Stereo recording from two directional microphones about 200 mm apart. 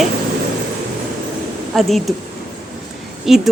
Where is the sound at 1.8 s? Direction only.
Centre (ahead or behind).